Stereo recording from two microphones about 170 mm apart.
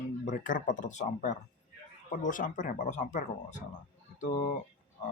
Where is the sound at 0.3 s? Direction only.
50° left (ahead or behind).